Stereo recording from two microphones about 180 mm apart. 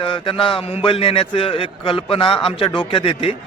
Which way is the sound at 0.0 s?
30° left (ahead or behind).